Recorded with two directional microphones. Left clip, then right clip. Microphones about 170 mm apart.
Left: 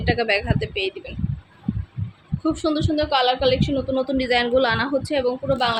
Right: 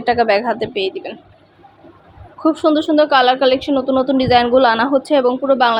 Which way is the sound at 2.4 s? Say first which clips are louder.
Right 8 dB; 15° right (ahead or behind).